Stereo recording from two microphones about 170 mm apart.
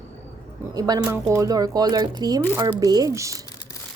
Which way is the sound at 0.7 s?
20° right (ahead or behind).